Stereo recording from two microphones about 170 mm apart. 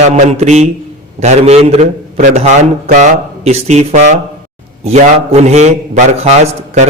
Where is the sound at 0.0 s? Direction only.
40° right (ahead or behind).